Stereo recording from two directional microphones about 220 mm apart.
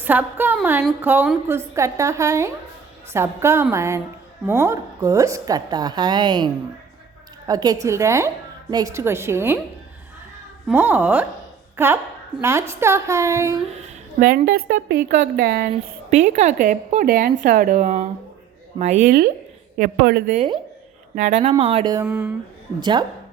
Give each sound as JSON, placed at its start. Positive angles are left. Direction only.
{"t": 0.0, "sound": "a woman's voice", "side_deg": -10}
{"t": 10.7, "sound": "a woman's voice", "side_deg": -10}
{"t": 13.8, "sound": "a woman's voice", "side_deg": -40}
{"t": 20.3, "sound": "a woman's voice", "side_deg": -25}
{"t": 21.9, "sound": "a woman's voice", "side_deg": -10}
{"t": 22.8, "sound": "a woman's voice", "side_deg": -20}